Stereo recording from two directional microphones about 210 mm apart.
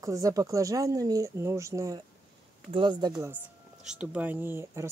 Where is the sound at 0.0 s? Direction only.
15° right (ahead or behind).